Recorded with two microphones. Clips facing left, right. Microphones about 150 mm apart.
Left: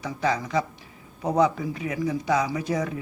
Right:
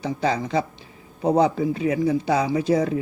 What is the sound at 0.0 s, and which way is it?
A man's voice, 30° right (ahead or behind).